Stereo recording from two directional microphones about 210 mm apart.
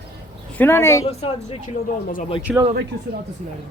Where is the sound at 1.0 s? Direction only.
30° left (ahead or behind).